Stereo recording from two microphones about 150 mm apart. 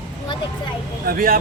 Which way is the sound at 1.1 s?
85° right.